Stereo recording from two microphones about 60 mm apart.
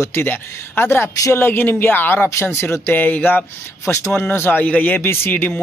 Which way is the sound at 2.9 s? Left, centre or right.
Left.